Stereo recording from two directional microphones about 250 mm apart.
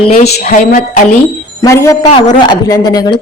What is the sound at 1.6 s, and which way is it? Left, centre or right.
A man's voice, centre.